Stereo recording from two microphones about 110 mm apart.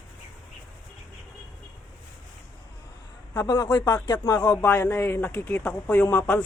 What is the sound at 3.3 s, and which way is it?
Speech, 35° left (ahead or behind).